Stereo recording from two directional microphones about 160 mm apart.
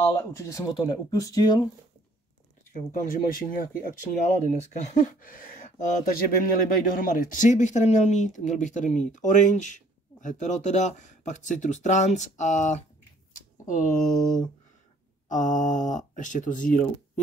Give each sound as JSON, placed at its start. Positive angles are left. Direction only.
{"t": 0.0, "sound": "speech", "side_deg": 20}
{"t": 2.7, "sound": "speech", "side_deg": 55}